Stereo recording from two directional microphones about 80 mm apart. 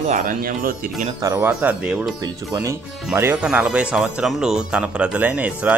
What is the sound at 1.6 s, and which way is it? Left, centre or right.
Speech, centre.